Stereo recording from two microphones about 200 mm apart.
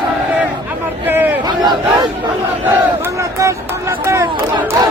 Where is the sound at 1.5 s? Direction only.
20° right (ahead or behind).